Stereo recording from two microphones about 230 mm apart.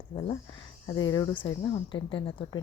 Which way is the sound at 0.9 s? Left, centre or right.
Centre.